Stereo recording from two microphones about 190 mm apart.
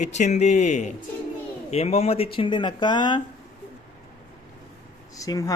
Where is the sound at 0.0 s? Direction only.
40° left (ahead or behind).